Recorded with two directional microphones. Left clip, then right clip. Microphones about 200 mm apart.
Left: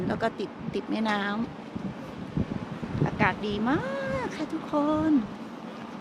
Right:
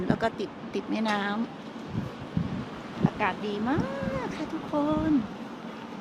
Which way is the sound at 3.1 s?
10° left (ahead or behind).